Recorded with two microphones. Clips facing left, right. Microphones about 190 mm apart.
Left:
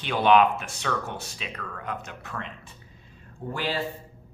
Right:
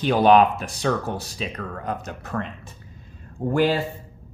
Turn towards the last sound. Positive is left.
turn(degrees=-45)  # may be behind; listen again after turning